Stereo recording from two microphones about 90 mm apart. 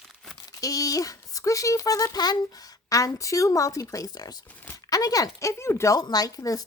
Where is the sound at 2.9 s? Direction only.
40° left (ahead or behind).